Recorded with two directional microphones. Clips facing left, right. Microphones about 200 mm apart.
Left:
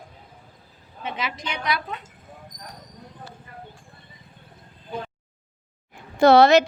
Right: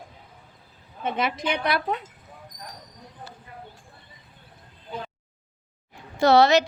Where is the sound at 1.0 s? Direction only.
55° right (ahead or behind).